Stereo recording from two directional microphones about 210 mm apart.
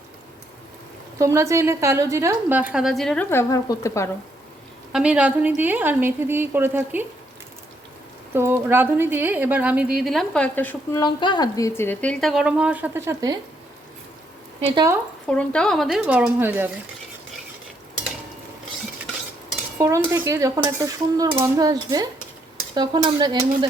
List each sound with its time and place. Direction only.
1.2 s a woman's voice: 15° right (ahead or behind); by 4.1 s 15° left (ahead or behind)
4.9 s a woman's voice: 5° right (ahead or behind)
8.3 s a woman's voice: 10° right (ahead or behind); by 11.0 s 10° left (ahead or behind)
11.0 s a woman's voice: 20° left (ahead or behind); by 13.4 s 15° right (ahead or behind)
15.3 s a woman's voice: 5° left (ahead or behind)
19.8 s a woman's voice: 15° right (ahead or behind)
22.7 s stir: 20° right (ahead or behind)